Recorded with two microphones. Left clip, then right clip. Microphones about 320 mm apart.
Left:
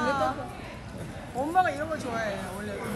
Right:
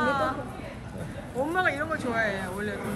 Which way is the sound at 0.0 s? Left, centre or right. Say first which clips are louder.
Right 1 dB; centre.